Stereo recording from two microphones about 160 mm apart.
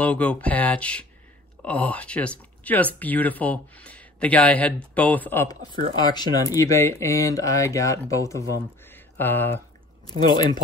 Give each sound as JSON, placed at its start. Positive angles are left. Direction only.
{"t": 0.0, "sound": "speech", "side_deg": 10}
{"t": 5.9, "sound": "speech", "side_deg": 25}
{"t": 10.0, "sound": "speech", "side_deg": 25}